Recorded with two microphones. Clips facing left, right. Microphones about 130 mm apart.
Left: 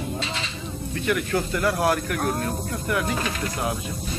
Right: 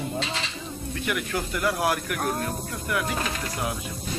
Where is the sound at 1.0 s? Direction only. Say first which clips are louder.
Left 5 dB; 10° right (ahead or behind).